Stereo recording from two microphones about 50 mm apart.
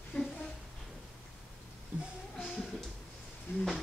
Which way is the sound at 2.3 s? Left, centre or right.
Centre.